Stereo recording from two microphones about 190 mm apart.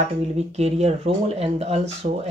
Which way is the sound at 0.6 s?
35° right (ahead or behind).